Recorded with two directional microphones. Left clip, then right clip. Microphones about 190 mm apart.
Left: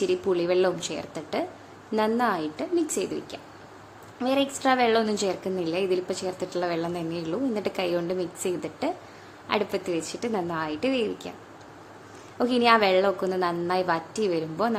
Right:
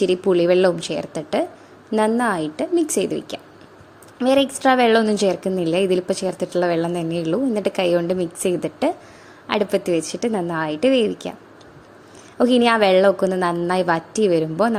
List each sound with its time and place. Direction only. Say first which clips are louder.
0.0 s a woman's voice: right 8 dB; 35° right (ahead or behind)
12.4 s a woman's voice: right 5 dB; 35° right (ahead or behind)